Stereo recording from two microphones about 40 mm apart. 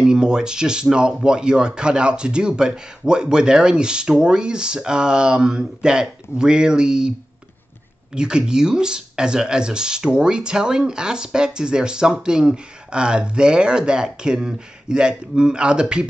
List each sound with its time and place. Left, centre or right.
0.0 s speech: centre